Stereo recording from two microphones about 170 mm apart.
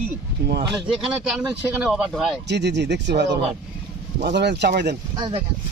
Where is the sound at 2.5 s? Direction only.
85° right.